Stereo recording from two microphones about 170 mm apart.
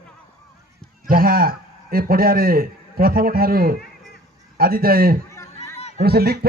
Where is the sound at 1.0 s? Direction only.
60° right (ahead or behind).